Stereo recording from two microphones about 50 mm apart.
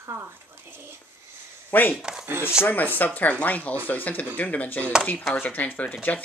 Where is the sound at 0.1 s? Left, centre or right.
Right.